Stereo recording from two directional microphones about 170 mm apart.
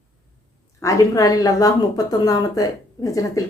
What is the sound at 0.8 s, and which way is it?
A woman's voice, 20° left (ahead or behind).